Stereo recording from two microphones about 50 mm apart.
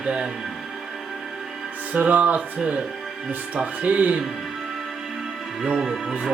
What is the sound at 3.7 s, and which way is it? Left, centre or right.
Speech, right.